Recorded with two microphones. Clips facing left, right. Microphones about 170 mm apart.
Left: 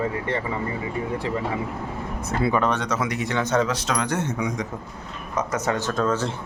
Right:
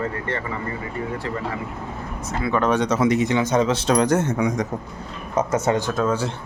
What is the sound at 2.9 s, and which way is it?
Speech, 25° right (ahead or behind).